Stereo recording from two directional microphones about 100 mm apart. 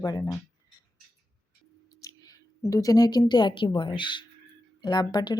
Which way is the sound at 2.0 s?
40° left (ahead or behind).